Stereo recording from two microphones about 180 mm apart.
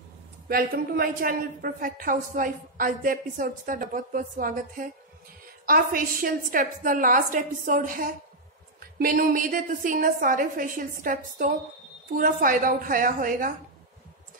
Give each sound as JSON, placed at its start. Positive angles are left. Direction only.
{"t": 0.5, "sound": "a woman's voice", "side_deg": -55}